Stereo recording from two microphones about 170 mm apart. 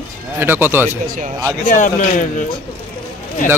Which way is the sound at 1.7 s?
50° left (ahead or behind).